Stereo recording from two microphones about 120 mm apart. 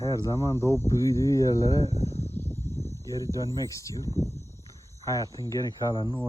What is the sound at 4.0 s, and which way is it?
Speech, 30° right (ahead or behind).